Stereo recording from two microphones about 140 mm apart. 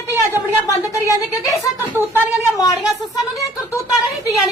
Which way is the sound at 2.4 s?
25° left (ahead or behind).